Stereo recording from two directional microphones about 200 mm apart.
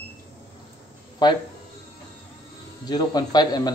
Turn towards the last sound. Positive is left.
turn(degrees=20)  # may be behind; listen again after turning